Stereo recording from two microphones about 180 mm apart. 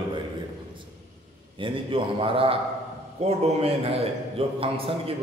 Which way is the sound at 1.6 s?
30° right (ahead or behind).